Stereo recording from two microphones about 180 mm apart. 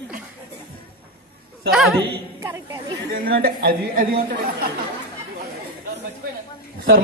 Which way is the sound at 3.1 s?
60° right (ahead or behind).